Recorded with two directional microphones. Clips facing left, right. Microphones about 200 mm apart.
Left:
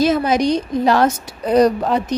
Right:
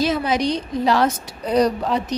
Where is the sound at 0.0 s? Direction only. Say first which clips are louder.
Left 4 dB; 45° left (ahead or behind).